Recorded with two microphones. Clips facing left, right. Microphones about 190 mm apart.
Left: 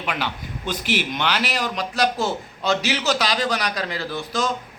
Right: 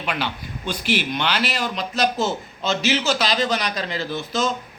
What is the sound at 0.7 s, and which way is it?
A man's voice, 20° left (ahead or behind).